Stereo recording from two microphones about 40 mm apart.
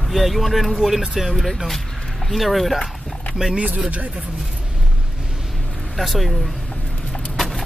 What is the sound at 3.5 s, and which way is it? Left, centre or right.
Speech, right.